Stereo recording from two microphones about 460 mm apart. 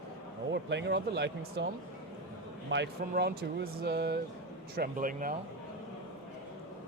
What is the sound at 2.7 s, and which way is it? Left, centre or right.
Speech, right.